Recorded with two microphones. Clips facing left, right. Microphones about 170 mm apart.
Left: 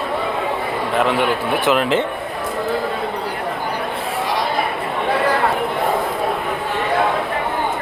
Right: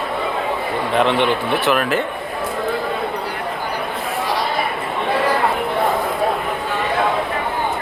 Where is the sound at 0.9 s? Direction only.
5° left (ahead or behind).